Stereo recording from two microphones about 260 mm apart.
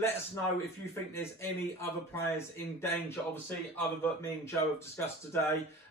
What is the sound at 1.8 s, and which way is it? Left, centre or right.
Speech, centre.